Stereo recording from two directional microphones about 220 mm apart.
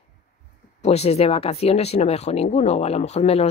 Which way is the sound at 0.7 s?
30° left (ahead or behind).